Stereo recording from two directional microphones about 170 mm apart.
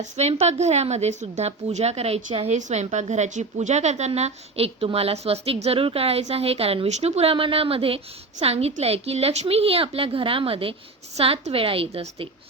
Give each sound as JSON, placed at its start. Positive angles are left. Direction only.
{"t": 0.0, "sound": "a woman's voice", "side_deg": -40}